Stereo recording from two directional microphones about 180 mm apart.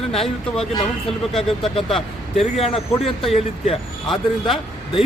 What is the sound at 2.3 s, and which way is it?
Speech, 35° left (ahead or behind).